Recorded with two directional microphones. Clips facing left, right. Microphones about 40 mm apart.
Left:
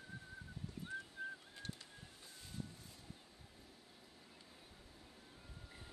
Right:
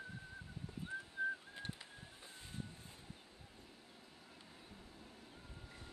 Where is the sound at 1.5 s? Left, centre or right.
Right.